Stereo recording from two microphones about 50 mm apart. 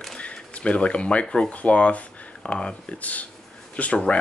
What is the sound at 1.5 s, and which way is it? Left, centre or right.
Speech, left.